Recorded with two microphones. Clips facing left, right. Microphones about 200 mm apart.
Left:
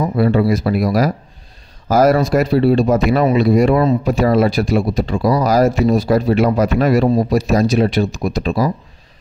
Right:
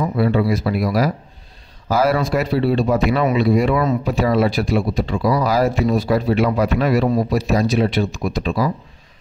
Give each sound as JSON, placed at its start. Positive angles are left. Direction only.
{"t": 0.0, "sound": "speech", "side_deg": 40}